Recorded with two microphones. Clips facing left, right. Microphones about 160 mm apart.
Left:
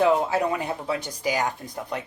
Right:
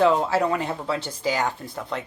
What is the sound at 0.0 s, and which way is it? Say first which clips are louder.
Speech: right 1 dB; 15° left (ahead or behind).